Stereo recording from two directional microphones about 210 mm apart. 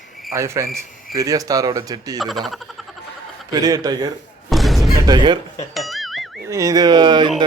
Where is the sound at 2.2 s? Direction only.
Centre (ahead or behind).